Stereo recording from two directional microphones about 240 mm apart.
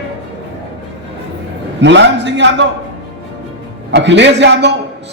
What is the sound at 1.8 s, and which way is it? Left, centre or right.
Speech, right.